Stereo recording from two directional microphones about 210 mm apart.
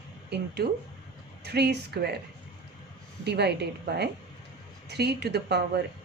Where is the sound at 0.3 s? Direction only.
50° right (ahead or behind).